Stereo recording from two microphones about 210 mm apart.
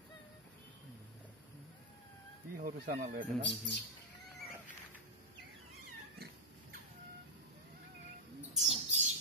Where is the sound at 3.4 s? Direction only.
55° left (ahead or behind).